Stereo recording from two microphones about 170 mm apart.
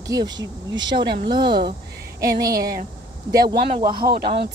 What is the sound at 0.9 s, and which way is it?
Speech, 70° right (ahead or behind).